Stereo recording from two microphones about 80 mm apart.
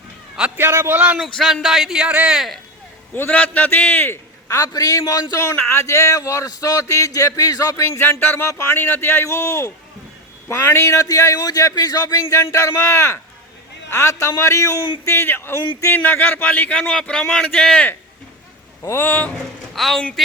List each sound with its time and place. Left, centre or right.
0.5 s a man's voice: right
0.9 s a man's voice: right
1.6 s speech: centre
3.2 s a man's voice: centre
4.4 s speech: left
5.3 s speech: left
12.1 s a man's voice: left; by 17.8 s centre
18.8 s speech: left
19.0 s a man's voice: centre
19.7 s speech: centre